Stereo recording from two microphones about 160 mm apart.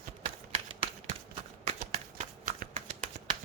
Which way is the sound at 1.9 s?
50° right (ahead or behind).